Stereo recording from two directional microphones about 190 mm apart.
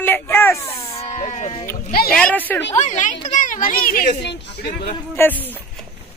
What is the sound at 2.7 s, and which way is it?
Speech, 40° left (ahead or behind).